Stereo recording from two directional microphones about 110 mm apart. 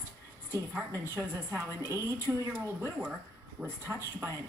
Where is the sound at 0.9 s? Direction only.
25° right (ahead or behind).